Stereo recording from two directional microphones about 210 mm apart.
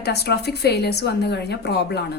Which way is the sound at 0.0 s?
50° left (ahead or behind).